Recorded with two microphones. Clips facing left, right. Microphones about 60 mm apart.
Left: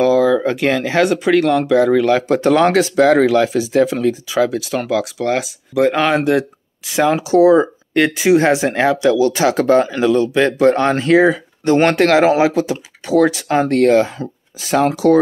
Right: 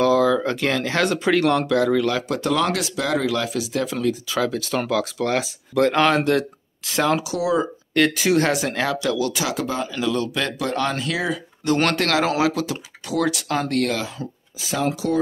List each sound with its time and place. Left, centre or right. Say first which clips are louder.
0.0 s speech: left 5 dB; centre
1.2 s speech: left 5 dB; centre
1.8 s speech: left 7 dB; left
4.4 s speech: left 7 dB; centre
7.2 s speech: left 11 dB; left
7.9 s speech: left 5 dB; centre; by 9.9 s left
9.9 s speech: left 9 dB; left